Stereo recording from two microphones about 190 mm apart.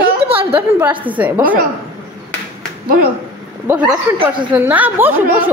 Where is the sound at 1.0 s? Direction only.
10° right (ahead or behind).